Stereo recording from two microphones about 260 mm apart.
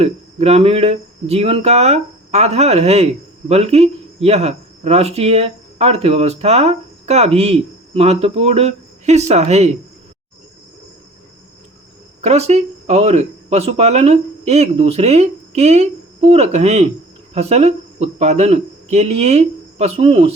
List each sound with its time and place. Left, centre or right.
0.0 s speech: right
12.2 s speech: right